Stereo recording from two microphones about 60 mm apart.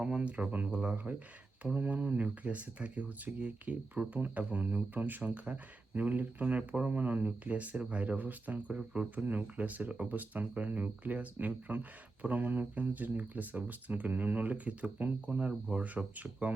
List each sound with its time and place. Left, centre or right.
0.0 s speech: centre